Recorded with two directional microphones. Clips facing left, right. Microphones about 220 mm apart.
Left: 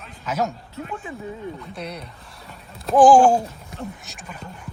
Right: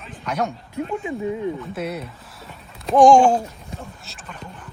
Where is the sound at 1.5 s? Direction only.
5° right (ahead or behind).